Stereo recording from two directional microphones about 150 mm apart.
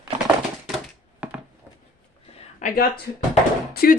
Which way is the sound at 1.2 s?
10° right (ahead or behind).